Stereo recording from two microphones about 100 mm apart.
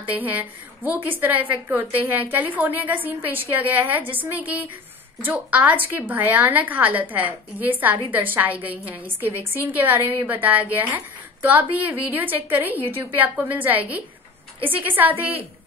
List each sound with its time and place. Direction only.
0.1 s a woman's voice: 15° right (ahead or behind)